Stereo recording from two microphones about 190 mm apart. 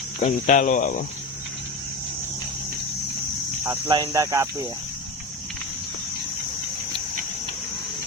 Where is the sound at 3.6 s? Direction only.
20° right (ahead or behind).